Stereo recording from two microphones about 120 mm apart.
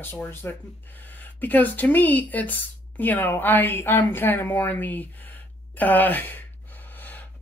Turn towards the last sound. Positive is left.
turn(degrees=15)  # may be behind; listen again after turning